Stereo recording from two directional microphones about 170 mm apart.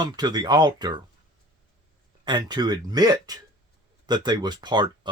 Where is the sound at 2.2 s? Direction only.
25° right (ahead or behind).